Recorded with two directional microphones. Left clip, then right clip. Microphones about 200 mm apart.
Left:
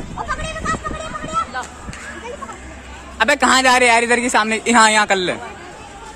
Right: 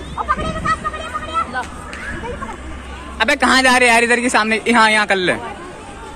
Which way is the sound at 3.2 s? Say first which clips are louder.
Even; 15° left (ahead or behind).